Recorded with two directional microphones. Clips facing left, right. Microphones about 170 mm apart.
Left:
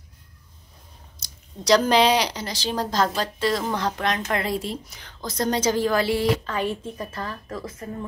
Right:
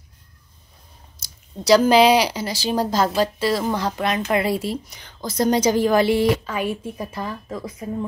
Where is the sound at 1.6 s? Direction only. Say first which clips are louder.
Right 4 dB; 5° right (ahead or behind).